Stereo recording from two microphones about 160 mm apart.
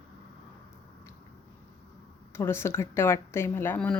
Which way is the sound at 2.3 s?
15° left (ahead or behind).